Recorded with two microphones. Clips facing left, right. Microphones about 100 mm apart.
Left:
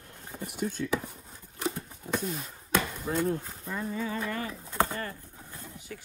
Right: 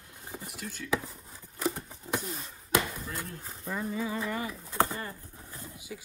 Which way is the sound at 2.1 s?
Centre (ahead or behind).